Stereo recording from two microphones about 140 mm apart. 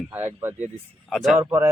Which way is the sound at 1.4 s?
20° right (ahead or behind).